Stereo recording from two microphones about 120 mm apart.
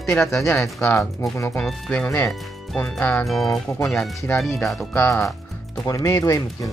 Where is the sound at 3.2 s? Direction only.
5° left (ahead or behind).